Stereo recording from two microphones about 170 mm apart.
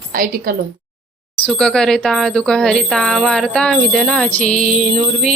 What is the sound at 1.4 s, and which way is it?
Speech, 5° left (ahead or behind).